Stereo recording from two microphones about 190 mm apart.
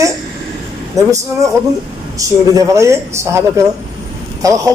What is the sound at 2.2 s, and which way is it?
Speech, 15° right (ahead or behind).